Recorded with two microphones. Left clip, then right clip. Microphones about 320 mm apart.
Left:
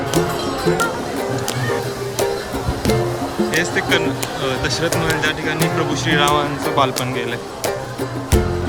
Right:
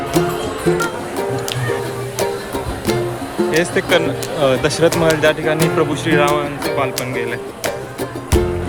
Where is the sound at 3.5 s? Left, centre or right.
Centre.